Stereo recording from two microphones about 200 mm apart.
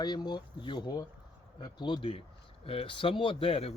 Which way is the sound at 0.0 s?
20° left (ahead or behind).